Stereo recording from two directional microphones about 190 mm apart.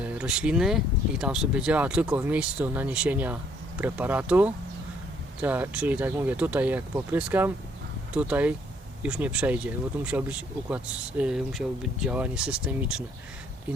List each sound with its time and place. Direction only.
0.0 s speech: 5° right (ahead or behind)